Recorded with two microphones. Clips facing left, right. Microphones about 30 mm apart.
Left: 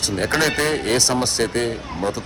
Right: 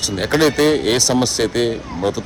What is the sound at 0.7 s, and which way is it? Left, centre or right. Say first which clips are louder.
Speech: right 4 dB; right.